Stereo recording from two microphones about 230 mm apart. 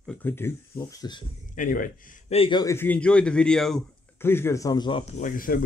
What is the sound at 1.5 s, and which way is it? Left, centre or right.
A man's voice, left.